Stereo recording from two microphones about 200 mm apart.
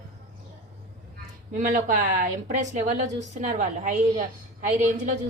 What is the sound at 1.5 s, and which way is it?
Speech, 40° right (ahead or behind).